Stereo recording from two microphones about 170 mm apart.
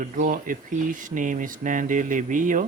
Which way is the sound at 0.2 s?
55° right (ahead or behind).